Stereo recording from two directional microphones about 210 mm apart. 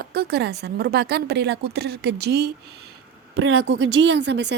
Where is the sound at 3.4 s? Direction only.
75° right (ahead or behind); by 4.6 s 55° right (ahead or behind).